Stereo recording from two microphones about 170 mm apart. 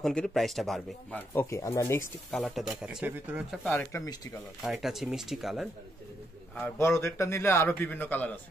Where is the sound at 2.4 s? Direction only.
Centre (ahead or behind).